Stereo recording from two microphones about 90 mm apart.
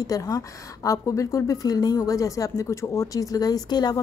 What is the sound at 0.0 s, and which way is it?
A woman's voice, 40° left (ahead or behind).